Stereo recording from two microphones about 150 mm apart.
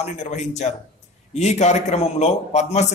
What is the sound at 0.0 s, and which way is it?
A man's voice, 50° left (ahead or behind).